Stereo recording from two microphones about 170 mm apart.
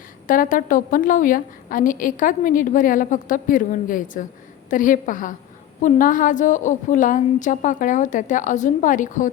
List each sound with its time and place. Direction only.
0.3 s a woman's voice: 50° left (ahead or behind)